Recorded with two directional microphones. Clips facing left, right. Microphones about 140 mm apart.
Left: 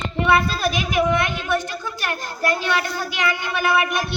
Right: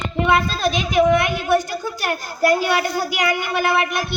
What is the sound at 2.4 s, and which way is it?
Speech, 10° right (ahead or behind).